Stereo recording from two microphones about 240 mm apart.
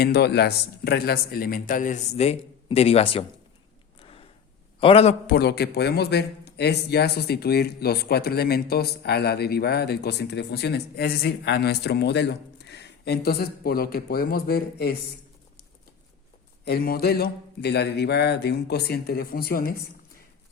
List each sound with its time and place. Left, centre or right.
0.0 s a man's voice: left
4.8 s a man's voice: left
5.2 s a man's voice: left
16.6 s a man's voice: left